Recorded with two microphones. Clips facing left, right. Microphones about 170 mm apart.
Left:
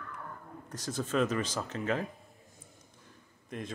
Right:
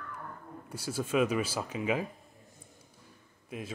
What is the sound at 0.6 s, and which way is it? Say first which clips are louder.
Speech: right 1 dB; 10° right (ahead or behind).